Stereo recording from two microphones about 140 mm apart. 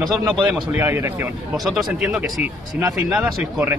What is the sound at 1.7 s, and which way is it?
Speech, centre (ahead or behind).